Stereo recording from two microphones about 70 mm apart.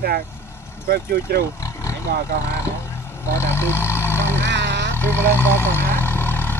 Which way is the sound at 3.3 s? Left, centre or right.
Left.